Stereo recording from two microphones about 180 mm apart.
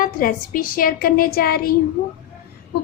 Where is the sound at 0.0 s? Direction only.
50° left (ahead or behind).